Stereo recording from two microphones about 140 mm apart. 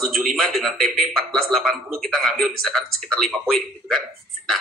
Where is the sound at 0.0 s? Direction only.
Centre (ahead or behind).